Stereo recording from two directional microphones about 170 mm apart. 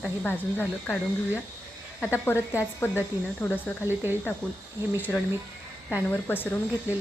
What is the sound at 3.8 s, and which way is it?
Speech, 10° right (ahead or behind).